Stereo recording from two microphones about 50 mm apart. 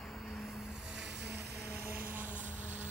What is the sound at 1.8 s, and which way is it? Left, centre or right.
Vehicle, right.